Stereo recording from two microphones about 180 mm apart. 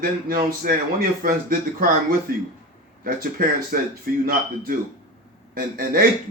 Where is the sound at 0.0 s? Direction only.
50° right (ahead or behind).